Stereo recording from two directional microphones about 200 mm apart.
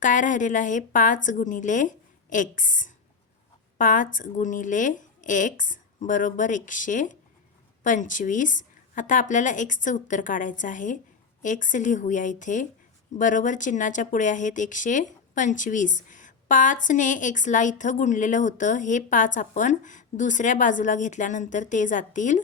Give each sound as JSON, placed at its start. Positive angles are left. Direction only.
{"t": 0.0, "sound": "a woman's voice", "side_deg": 40}
{"t": 16.0, "sound": "a sound", "side_deg": 40}
{"t": 16.8, "sound": "a woman's voice", "side_deg": 40}